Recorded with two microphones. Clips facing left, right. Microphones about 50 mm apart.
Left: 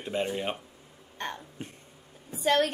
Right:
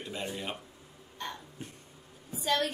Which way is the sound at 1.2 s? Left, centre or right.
Left.